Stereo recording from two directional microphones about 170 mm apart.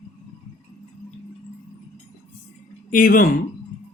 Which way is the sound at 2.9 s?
55° left (ahead or behind).